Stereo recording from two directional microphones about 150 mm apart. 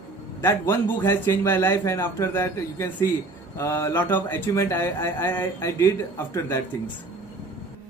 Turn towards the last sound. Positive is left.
turn(degrees=20)  # may be behind; listen again after turning